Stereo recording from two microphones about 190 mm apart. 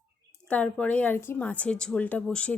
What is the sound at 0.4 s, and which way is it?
A woman's voice, 5° left (ahead or behind).